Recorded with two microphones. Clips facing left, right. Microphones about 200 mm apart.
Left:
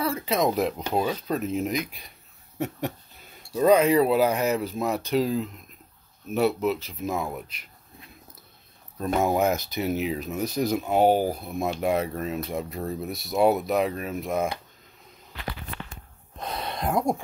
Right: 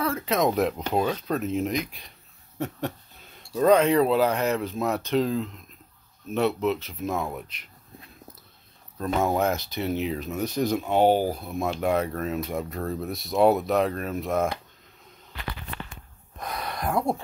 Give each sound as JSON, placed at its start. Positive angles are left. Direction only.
{"t": 0.0, "sound": "speech", "side_deg": 0}
{"t": 3.5, "sound": "speech", "side_deg": 5}
{"t": 9.0, "sound": "speech", "side_deg": 10}
{"t": 16.3, "sound": "a sound", "side_deg": 25}